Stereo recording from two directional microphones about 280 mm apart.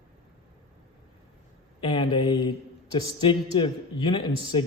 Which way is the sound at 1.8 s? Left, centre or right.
Centre.